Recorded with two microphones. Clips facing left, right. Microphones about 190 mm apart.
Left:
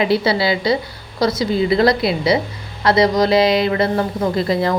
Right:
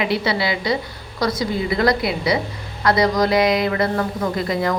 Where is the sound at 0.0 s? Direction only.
35° left (ahead or behind).